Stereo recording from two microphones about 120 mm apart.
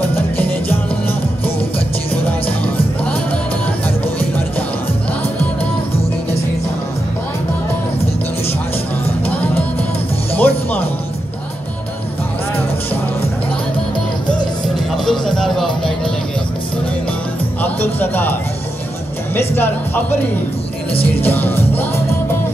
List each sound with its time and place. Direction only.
0.4 s music: 15° left (ahead or behind)
9.2 s music: 15° left (ahead or behind)
15.0 s music: 5° left (ahead or behind)
17.6 s music: 15° left (ahead or behind)
19.3 s music: 15° left (ahead or behind)